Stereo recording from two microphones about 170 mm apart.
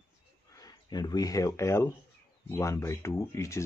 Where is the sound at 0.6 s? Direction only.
25° left (ahead or behind).